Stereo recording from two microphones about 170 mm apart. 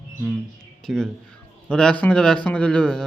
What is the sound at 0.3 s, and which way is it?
A man's voice, 5° left (ahead or behind).